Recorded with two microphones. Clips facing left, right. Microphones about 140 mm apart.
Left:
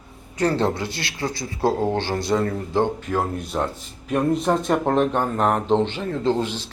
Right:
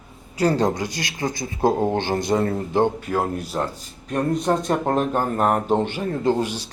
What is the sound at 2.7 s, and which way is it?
Speech, 15° right (ahead or behind).